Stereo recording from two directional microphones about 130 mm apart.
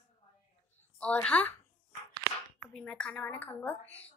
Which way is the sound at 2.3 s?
20° right (ahead or behind).